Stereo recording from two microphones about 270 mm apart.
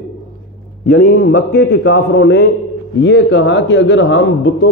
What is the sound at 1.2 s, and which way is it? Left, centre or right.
A man's voice, left.